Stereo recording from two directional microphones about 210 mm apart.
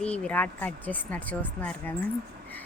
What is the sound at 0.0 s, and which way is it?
Speech, 5° left (ahead or behind).